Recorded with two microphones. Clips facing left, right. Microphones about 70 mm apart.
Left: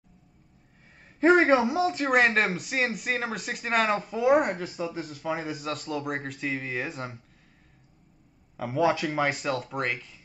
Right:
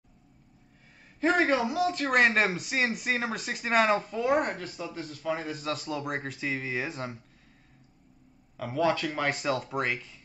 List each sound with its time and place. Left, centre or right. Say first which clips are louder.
1.2 s a man's voice: left 5 dB; left
2.0 s speech: even; centre
4.1 s speech: left 4 dB; centre
8.5 s speech: left 2 dB; centre
9.3 s speech: even; centre